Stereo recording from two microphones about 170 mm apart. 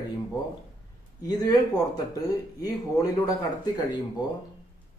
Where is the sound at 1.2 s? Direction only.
20° left (ahead or behind).